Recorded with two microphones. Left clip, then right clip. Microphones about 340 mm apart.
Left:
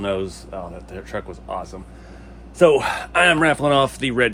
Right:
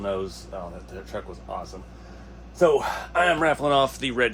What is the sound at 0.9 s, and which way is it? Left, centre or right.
Speech, left.